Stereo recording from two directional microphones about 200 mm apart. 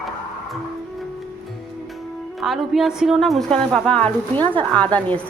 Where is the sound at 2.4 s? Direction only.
Centre (ahead or behind).